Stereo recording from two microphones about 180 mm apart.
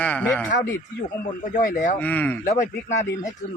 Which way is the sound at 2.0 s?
10° left (ahead or behind).